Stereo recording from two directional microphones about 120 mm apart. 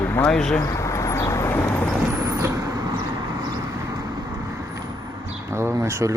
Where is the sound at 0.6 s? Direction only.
25° left (ahead or behind).